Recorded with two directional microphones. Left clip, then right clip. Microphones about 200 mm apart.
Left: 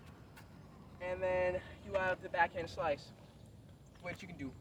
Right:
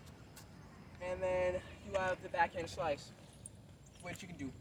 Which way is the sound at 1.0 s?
15° right (ahead or behind).